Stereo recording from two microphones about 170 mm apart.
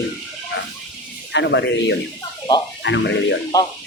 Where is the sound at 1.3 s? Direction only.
90° left.